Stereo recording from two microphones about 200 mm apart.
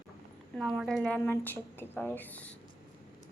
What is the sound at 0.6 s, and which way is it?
Speech, centre (ahead or behind).